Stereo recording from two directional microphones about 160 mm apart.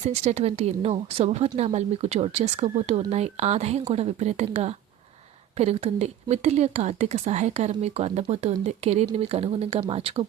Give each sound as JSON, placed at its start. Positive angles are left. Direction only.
{"t": 0.0, "sound": "speech", "side_deg": -45}